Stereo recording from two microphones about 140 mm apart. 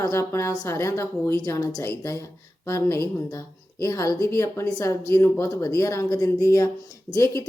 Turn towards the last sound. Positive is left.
turn(degrees=20)  # may be behind; listen again after turning